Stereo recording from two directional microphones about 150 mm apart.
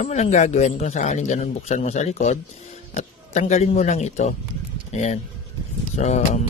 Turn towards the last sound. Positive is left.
turn(degrees=50)  # may be behind; listen again after turning